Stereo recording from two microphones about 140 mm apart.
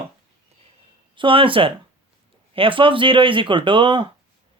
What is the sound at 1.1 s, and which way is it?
Speech, 40° right (ahead or behind).